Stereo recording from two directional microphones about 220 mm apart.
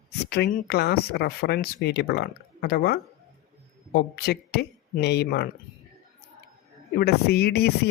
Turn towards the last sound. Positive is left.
turn(degrees=45)  # may be behind; listen again after turning